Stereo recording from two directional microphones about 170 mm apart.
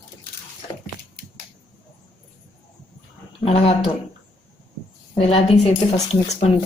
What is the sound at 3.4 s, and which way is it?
Speech, 35° left (ahead or behind).